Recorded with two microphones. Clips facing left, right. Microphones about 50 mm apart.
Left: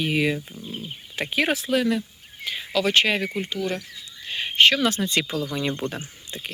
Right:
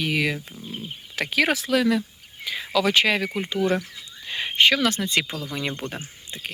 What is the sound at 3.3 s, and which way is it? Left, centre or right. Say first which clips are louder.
Speech: right 2 dB; right.